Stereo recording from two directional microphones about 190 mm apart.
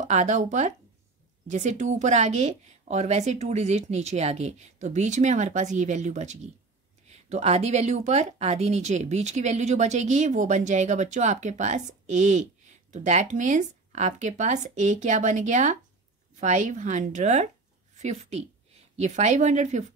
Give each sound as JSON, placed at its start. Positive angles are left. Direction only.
{"t": 0.1, "sound": "speech", "side_deg": -40}